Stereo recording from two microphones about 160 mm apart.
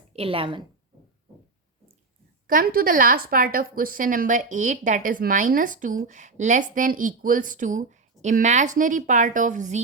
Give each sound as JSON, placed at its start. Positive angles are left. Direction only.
{"t": 0.1, "sound": "a woman's voice", "side_deg": -35}
{"t": 2.5, "sound": "a woman's voice", "side_deg": -65}